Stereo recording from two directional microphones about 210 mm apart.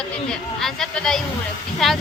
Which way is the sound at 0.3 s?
5° left (ahead or behind).